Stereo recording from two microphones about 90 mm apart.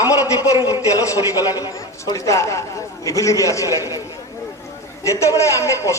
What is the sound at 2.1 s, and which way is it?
A woman's voice, 35° left (ahead or behind).